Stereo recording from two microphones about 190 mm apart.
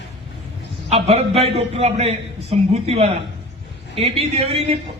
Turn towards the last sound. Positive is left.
turn(degrees=-30)  # may be behind; listen again after turning